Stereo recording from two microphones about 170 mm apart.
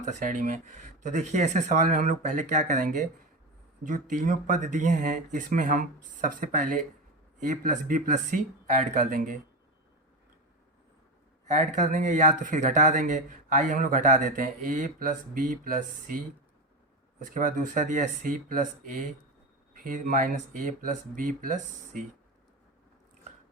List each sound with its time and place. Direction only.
0.0 s speech: 45° right (ahead or behind)
4.2 s speech: 50° right (ahead or behind)
11.4 s speech: 45° right (ahead or behind)
17.2 s speech: 50° right (ahead or behind)
19.8 s speech: 50° right (ahead or behind)